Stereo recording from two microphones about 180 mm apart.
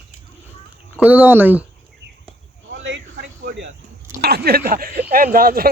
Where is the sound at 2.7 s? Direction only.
85° right.